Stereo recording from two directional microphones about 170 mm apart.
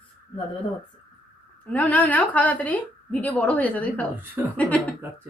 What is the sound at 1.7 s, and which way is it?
A woman's voice, 10° left (ahead or behind).